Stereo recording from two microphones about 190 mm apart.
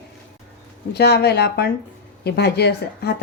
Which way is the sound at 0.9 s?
60° left (ahead or behind).